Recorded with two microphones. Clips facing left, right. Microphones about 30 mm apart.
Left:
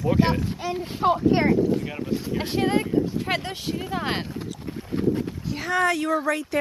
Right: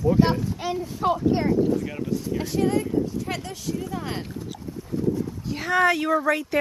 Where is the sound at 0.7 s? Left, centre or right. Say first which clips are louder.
Left 3 dB; left.